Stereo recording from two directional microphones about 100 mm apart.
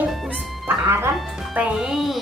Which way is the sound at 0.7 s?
25° right (ahead or behind).